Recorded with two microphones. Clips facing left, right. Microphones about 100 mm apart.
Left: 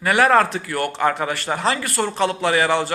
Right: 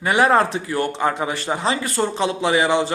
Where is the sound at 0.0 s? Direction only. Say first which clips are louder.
Even; 20° right (ahead or behind).